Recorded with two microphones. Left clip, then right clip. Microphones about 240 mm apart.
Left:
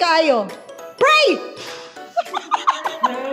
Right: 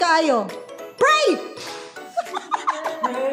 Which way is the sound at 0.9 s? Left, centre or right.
Centre.